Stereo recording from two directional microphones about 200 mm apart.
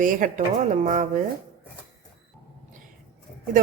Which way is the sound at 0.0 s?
40° right (ahead or behind).